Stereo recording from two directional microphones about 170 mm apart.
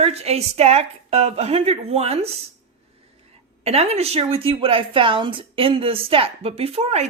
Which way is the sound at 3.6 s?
35° right (ahead or behind).